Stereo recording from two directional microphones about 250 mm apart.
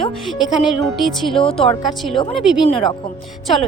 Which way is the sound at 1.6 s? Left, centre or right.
Left.